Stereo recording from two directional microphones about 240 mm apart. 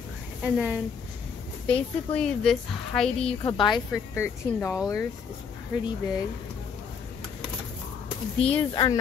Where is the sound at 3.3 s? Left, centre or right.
Centre.